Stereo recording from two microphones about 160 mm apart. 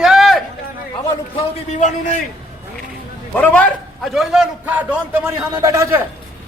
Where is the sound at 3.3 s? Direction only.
10° left (ahead or behind); by 6.0 s 20° right (ahead or behind).